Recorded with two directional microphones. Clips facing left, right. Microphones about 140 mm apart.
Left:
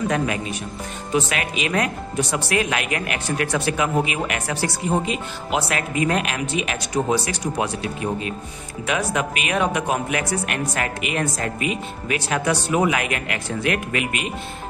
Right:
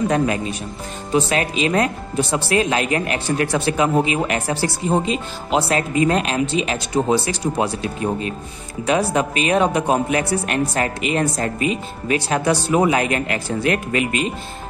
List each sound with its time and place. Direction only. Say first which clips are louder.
0.1 s speech: right 4 dB; 30° right (ahead or behind)